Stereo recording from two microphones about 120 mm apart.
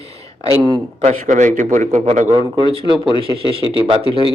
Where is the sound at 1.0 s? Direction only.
85° right.